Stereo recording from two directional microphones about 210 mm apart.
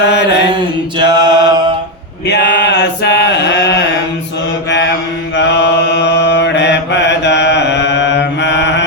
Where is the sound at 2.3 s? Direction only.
55° left (ahead or behind).